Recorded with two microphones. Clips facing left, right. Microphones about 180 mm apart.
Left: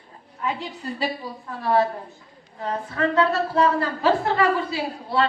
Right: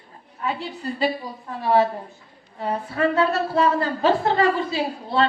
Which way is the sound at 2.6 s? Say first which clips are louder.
Right 2 dB; 10° right (ahead or behind).